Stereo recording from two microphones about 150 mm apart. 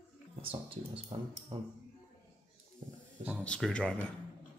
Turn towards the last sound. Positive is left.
turn(degrees=5)  # may be behind; listen again after turning